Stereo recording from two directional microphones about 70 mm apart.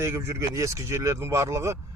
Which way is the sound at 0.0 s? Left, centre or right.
Right.